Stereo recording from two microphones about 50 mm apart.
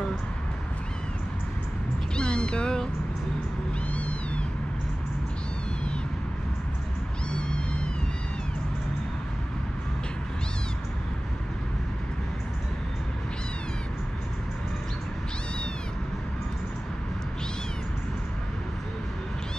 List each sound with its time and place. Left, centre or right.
2.1 s cat: centre
3.9 s cat: left